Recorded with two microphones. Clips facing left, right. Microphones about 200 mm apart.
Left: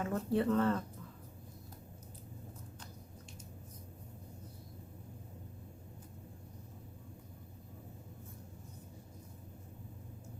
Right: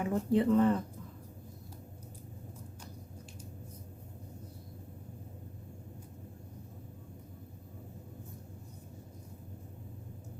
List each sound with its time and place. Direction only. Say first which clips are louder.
0.0 s speech: right 4 dB; 15° right (ahead or behind)